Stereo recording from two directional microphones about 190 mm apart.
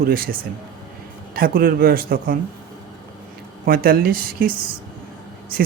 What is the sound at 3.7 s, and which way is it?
Speech, 50° right (ahead or behind).